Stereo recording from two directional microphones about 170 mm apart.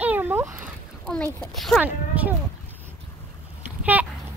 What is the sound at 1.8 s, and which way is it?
Speech, 10° right (ahead or behind).